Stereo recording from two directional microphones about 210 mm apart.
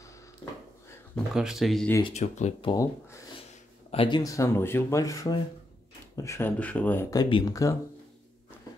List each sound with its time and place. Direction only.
1.1 s speech: centre (ahead or behind)
2.0 s speech: 30° left (ahead or behind)
2.7 s speech: 15° left (ahead or behind)